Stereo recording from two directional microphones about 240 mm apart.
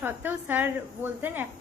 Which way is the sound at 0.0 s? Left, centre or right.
Centre.